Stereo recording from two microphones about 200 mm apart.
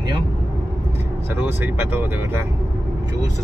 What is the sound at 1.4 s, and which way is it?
Speech, 10° right (ahead or behind).